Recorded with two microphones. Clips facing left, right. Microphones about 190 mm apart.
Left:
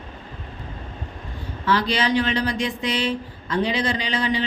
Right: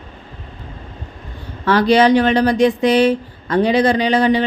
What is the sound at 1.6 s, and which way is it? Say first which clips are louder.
Speech: right 10 dB; 60° right (ahead or behind).